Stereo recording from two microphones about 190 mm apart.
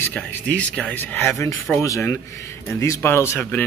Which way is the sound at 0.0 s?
5° left (ahead or behind).